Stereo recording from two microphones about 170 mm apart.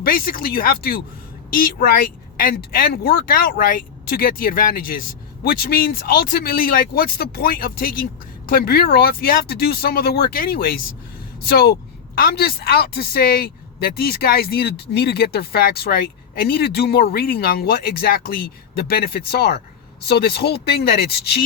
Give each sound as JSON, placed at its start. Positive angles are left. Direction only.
{"t": 0.0, "sound": "speech", "side_deg": 60}